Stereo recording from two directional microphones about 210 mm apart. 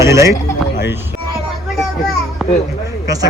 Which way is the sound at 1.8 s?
Centre (ahead or behind).